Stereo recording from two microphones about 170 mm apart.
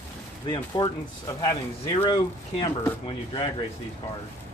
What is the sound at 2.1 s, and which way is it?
Speech, 20° left (ahead or behind).